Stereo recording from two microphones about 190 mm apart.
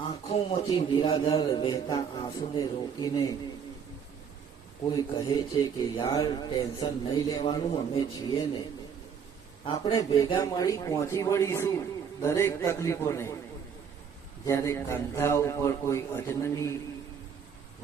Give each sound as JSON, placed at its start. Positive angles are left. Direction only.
{"t": 0.0, "sound": "speech", "side_deg": 25}
{"t": 4.9, "sound": "speech", "side_deg": 20}
{"t": 9.6, "sound": "a man's voice", "side_deg": 25}
{"t": 14.4, "sound": "a man's voice", "side_deg": 15}